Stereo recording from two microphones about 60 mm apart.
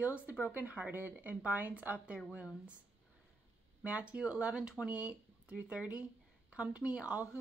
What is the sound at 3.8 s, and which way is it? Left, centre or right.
A woman's voice, right.